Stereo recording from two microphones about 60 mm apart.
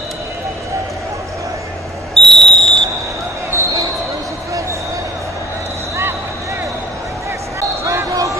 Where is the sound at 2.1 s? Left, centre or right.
Centre.